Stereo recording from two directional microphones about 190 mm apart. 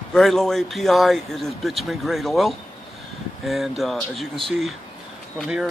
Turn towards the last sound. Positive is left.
turn(degrees=-5)  # may be behind; listen again after turning